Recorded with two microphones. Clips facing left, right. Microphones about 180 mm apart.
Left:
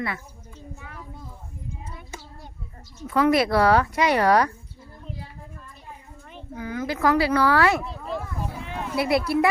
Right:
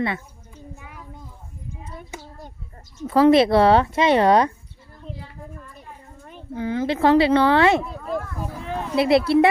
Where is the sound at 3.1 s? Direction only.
30° right (ahead or behind).